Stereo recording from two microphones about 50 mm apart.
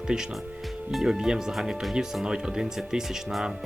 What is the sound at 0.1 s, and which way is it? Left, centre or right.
Speech, centre.